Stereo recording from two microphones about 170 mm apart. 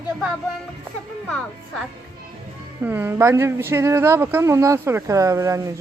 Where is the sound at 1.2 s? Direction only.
5° left (ahead or behind).